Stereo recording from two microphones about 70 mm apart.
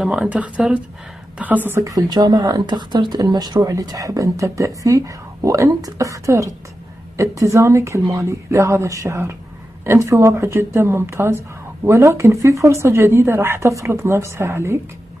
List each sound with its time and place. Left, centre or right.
0.0 s a woman's voice: centre
1.9 s speech: right
3.6 s speech: right